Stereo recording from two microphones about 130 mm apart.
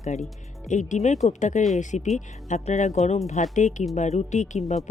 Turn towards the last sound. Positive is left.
turn(degrees=65)  # may be behind; listen again after turning